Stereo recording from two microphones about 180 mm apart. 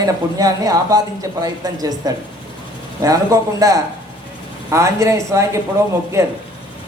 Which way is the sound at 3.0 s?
20° right (ahead or behind).